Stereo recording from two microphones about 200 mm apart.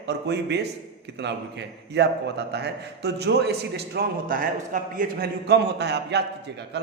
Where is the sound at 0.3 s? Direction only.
55° right (ahead or behind).